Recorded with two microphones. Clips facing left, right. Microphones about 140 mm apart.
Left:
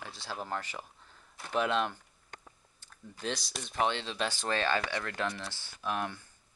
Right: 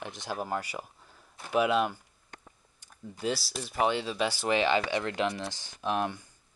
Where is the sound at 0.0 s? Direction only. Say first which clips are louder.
Right 5 dB; 20° right (ahead or behind).